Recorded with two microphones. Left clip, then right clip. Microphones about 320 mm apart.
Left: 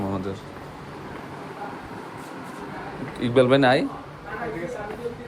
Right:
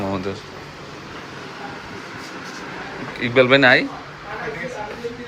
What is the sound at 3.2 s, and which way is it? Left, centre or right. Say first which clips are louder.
Speech: right 4 dB; centre.